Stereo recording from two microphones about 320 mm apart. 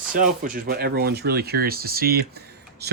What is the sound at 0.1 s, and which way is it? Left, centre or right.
Speech, right.